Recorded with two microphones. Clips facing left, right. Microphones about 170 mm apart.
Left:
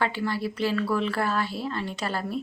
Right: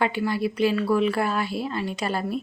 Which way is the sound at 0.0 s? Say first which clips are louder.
Right 3 dB; 15° right (ahead or behind).